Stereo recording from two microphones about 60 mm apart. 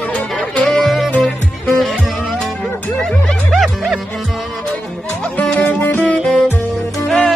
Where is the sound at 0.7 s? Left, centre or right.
Centre.